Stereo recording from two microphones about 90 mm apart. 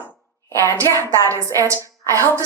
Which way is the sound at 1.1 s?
35° right (ahead or behind).